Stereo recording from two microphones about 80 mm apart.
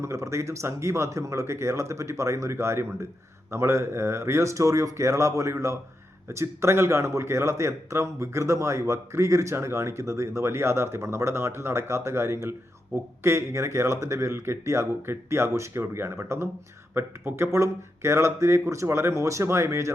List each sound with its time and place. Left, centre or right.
0.0 s a man's voice: right